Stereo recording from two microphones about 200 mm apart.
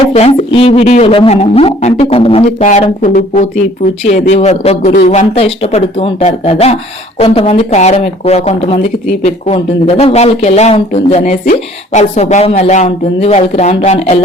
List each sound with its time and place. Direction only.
0.1 s speech: 30° left (ahead or behind)